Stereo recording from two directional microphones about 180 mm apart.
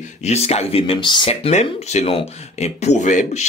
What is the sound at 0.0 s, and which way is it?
Speech, 35° left (ahead or behind).